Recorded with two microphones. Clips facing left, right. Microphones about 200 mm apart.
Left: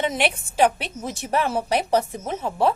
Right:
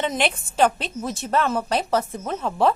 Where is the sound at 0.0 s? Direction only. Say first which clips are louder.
Even; 10° left (ahead or behind).